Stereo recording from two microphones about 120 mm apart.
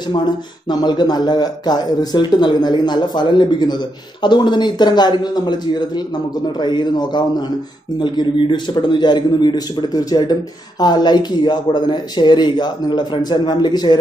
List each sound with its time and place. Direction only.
0.1 s speech: 35° left (ahead or behind)